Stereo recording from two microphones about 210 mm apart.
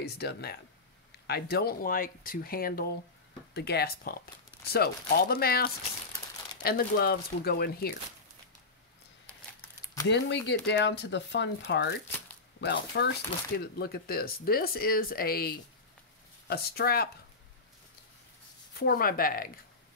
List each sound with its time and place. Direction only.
0.0 s speech: 50° left (ahead or behind)
10.0 s speech: 60° left (ahead or behind)
18.8 s speech: 45° left (ahead or behind)